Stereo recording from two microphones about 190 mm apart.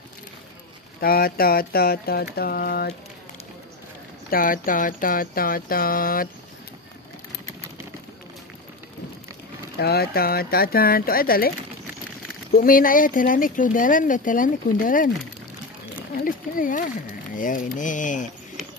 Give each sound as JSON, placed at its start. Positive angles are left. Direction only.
{"t": 1.0, "sound": "speech", "side_deg": 50}
{"t": 4.3, "sound": "speech", "side_deg": 45}
{"t": 9.8, "sound": "speech", "side_deg": 55}
{"t": 12.6, "sound": "speech", "side_deg": 45}
{"t": 16.2, "sound": "speech", "side_deg": 45}